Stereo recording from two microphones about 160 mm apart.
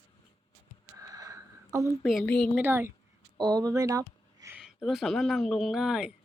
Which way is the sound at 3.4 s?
25° right (ahead or behind).